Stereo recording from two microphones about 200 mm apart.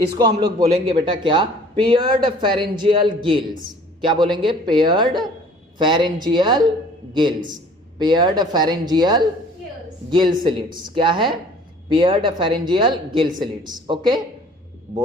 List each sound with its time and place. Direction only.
0.2 s a man's voice: 20° right (ahead or behind)
0.6 s a man's voice: 30° right (ahead or behind)